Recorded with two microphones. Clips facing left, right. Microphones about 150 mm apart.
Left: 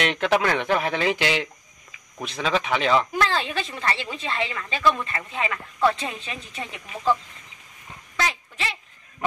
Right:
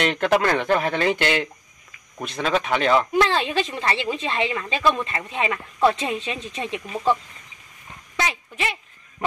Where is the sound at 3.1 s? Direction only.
20° right (ahead or behind).